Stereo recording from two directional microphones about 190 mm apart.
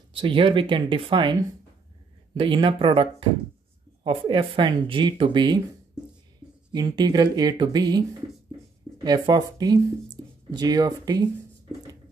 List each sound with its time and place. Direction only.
0.1 s speech: 30° right (ahead or behind)
2.3 s speech: 25° right (ahead or behind)
6.7 s speech: 20° right (ahead or behind)
9.0 s speech: 20° right (ahead or behind)